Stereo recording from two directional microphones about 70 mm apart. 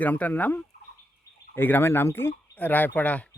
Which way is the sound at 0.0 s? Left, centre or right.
Left.